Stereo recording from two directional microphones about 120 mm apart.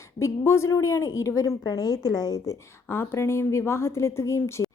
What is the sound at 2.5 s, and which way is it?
A woman's voice, 20° left (ahead or behind).